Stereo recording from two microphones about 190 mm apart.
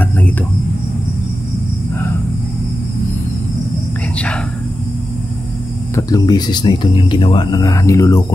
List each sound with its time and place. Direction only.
5.9 s speech: 20° left (ahead or behind)